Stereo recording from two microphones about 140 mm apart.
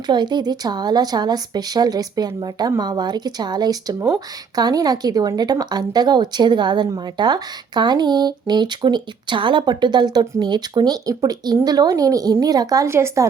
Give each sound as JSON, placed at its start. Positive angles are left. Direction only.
{"t": 0.1, "sound": "speech", "side_deg": -30}